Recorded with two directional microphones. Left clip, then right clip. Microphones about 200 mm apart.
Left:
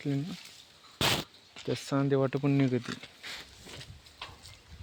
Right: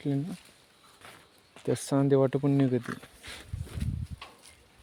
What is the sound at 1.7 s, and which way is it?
Speech, 25° right (ahead or behind).